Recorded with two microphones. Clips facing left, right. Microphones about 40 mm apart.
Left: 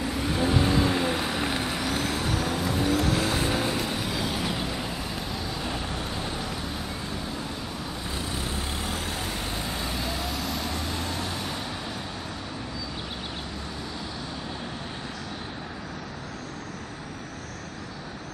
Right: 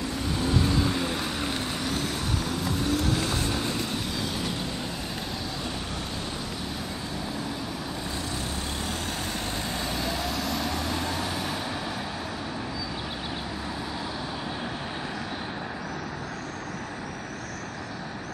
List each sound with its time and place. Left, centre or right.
0.3 s vehicle: left
9.8 s vehicle: centre